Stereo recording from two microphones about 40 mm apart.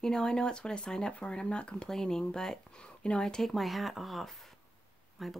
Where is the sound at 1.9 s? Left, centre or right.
Centre.